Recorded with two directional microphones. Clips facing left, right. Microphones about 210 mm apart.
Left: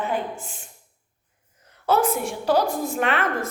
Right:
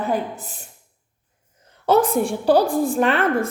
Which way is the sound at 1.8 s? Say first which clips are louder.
Right 4 dB; 30° right (ahead or behind).